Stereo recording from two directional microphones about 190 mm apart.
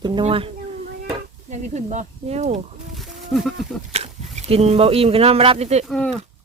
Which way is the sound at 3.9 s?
35° right (ahead or behind).